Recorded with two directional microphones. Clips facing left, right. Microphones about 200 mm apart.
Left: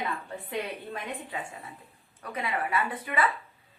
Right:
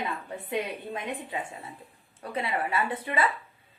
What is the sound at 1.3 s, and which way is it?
Speech, 20° right (ahead or behind).